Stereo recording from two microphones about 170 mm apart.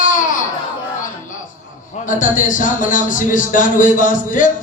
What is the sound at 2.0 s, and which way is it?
Speech, 50° left (ahead or behind).